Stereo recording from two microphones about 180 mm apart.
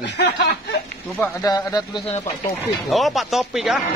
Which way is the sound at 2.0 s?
40° left (ahead or behind).